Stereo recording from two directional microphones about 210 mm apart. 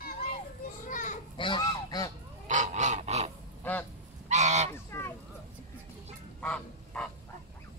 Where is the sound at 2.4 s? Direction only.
35° right (ahead or behind).